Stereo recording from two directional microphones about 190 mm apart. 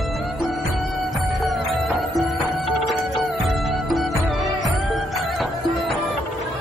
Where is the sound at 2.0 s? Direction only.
Centre (ahead or behind).